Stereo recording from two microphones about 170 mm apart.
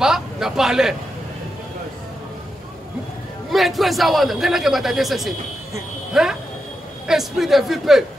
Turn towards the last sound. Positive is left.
turn(degrees=0)  # may be behind; listen again after turning